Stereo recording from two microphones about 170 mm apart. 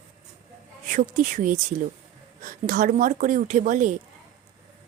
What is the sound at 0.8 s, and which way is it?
Speech, 50° right (ahead or behind).